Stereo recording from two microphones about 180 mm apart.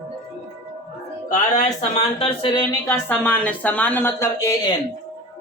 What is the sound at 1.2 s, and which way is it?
Speech, 45° left (ahead or behind).